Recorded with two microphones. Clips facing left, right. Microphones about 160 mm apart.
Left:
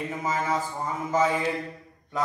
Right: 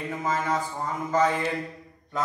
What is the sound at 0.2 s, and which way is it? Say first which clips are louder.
Speech: right 1 dB; 5° left (ahead or behind).